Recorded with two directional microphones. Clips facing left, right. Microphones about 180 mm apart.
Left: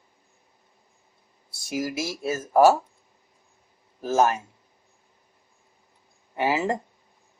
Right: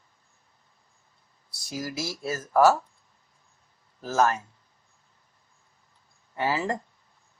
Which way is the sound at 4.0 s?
25° left (ahead or behind).